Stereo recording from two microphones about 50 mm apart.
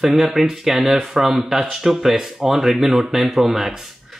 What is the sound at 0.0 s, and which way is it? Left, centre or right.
Speech, centre.